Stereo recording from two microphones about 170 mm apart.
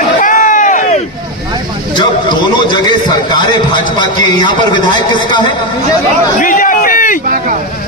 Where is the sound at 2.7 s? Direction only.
25° left (ahead or behind).